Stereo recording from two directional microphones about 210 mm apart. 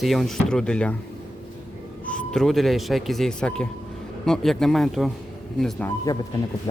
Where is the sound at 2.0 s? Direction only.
5° left (ahead or behind).